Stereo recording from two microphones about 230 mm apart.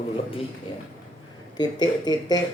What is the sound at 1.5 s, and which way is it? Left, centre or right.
Speech, centre.